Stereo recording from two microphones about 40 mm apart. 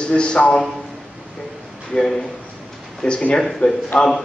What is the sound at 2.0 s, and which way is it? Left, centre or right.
Speech, centre.